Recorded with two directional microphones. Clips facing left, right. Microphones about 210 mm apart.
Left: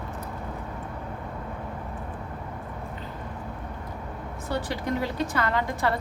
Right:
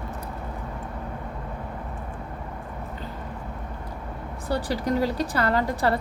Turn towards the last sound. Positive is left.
turn(degrees=-35)  # may be behind; listen again after turning